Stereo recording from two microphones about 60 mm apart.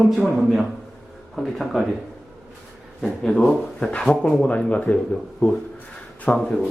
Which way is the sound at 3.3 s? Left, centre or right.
Centre.